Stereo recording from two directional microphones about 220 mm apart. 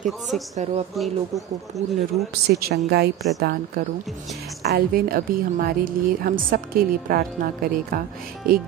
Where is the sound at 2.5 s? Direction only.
45° right (ahead or behind).